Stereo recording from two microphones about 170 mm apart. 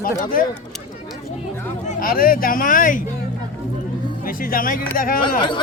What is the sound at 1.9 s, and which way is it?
Speech, 55° left (ahead or behind).